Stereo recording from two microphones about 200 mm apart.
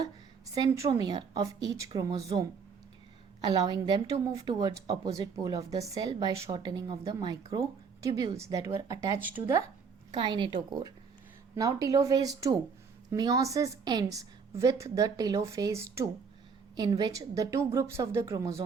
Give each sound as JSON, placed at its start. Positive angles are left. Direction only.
{"t": 0.5, "sound": "a woman's voice", "side_deg": -15}
{"t": 10.1, "sound": "a woman's voice", "side_deg": -25}